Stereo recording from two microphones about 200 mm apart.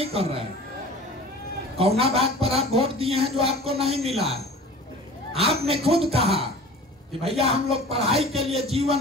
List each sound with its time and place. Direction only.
0.0 s a sound: 30° right (ahead or behind)
1.8 s a man's voice: 30° right (ahead or behind)
5.3 s a man's voice: 30° right (ahead or behind)